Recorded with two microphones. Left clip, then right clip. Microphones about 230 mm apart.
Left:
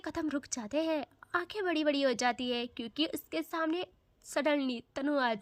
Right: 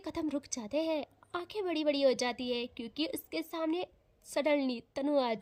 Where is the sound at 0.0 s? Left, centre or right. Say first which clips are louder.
Left 1 dB; centre.